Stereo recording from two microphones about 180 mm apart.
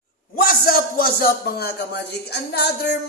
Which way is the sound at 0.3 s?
55° left (ahead or behind).